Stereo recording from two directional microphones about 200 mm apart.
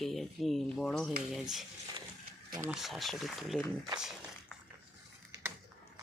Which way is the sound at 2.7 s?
Centre (ahead or behind).